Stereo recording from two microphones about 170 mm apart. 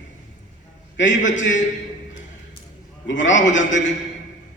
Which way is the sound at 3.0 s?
90° left.